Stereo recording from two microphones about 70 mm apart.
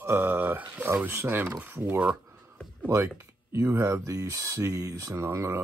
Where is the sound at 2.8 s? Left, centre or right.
Right.